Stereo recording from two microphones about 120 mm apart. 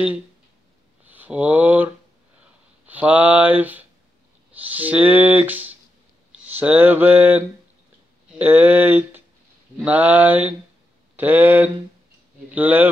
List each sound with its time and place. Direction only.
1.0 s speech: 15° right (ahead or behind)
2.9 s speech: 10° right (ahead or behind)